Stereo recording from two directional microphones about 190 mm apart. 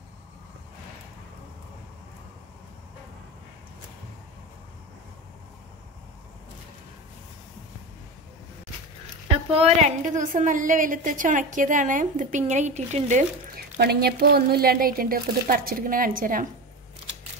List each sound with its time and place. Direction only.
9.5 s a woman's voice: 35° right (ahead or behind)
13.7 s speech: 55° right (ahead or behind)